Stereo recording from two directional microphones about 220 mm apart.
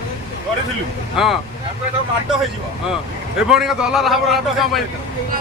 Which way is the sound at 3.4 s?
5° right (ahead or behind).